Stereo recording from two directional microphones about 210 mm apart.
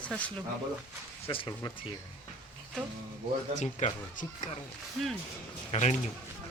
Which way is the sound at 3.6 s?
35° left (ahead or behind).